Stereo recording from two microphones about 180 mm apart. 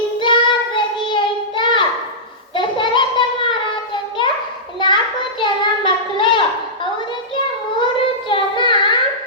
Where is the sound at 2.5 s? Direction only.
25° left (ahead or behind).